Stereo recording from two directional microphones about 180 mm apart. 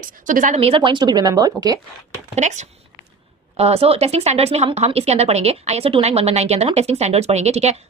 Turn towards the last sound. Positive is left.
turn(degrees=-35)  # may be behind; listen again after turning